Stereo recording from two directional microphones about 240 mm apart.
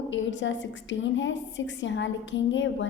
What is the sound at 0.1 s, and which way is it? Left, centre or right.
A woman's voice, left.